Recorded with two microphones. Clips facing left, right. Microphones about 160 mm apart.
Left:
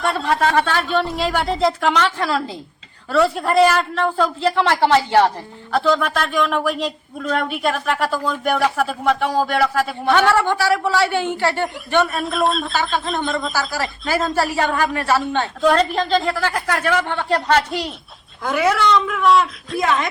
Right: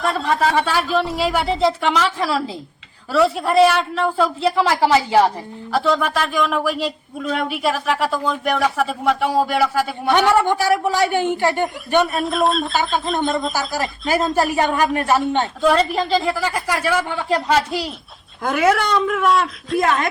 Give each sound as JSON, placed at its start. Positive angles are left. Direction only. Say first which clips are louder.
{"t": 0.0, "sound": "speech", "louder": "even", "side_deg": 0}
{"t": 10.1, "sound": "a man's voice", "louder": "right 1 dB", "side_deg": -15}
{"t": 12.0, "sound": "speech", "louder": "right 1 dB", "side_deg": 0}
{"t": 14.3, "sound": "a man's voice", "louder": "right 2 dB", "side_deg": -15}
{"t": 15.6, "sound": "speech", "louder": "left 1 dB", "side_deg": -5}
{"t": 18.4, "sound": "speech", "louder": "even", "side_deg": -50}